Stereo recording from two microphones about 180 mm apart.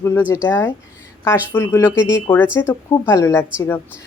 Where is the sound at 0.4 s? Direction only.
10° left (ahead or behind).